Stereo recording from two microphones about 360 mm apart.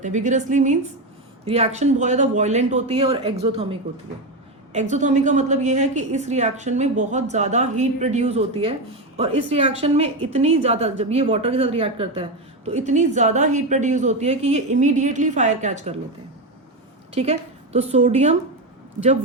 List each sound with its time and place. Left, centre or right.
0.0 s a woman's voice: centre
17.2 s a woman's voice: centre